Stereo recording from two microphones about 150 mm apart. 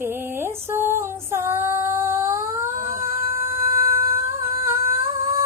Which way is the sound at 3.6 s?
70° right (ahead or behind).